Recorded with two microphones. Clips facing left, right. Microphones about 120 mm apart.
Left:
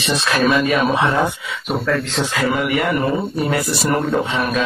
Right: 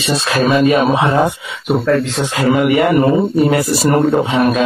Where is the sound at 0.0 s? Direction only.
35° right (ahead or behind).